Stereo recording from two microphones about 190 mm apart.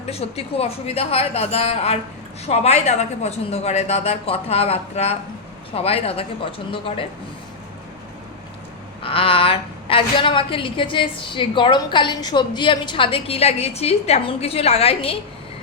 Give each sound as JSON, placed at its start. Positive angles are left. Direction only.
{"t": 0.0, "sound": "a woman's voice", "side_deg": 35}
{"t": 9.0, "sound": "a woman's voice", "side_deg": 30}